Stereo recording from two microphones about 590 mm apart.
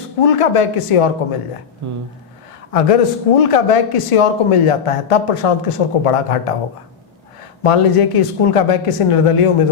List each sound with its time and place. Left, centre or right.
0.2 s speech: left
2.7 s speech: left
7.6 s speech: left